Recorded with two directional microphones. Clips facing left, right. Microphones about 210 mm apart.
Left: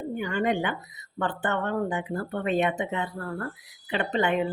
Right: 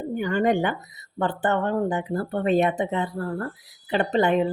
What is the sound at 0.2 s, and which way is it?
Speech, 40° right (ahead or behind).